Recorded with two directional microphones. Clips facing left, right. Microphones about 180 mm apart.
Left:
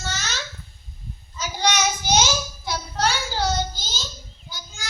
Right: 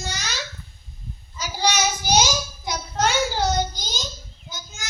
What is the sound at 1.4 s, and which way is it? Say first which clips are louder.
Child singing: even; 10° right (ahead or behind).